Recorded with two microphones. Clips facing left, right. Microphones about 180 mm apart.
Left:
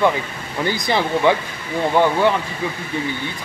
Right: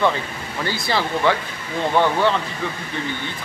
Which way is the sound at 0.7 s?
20° left (ahead or behind).